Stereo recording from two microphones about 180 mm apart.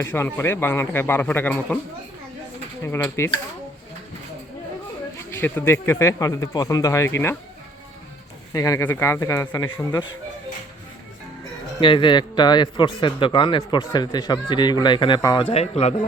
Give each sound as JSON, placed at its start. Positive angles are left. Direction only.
{"t": 0.0, "sound": "speech", "side_deg": 10}
{"t": 2.8, "sound": "speech", "side_deg": 15}
{"t": 5.1, "sound": "speech", "side_deg": 10}
{"t": 8.5, "sound": "speech", "side_deg": 20}
{"t": 11.8, "sound": "speech", "side_deg": 25}
{"t": 15.5, "sound": "speech", "side_deg": 35}